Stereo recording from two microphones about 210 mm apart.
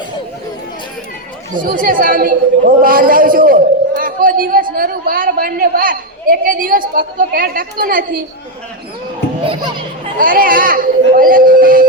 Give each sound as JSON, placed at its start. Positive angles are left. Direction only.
{"t": 1.6, "sound": "a man's voice", "side_deg": -40}
{"t": 10.2, "sound": "a man's voice", "side_deg": -40}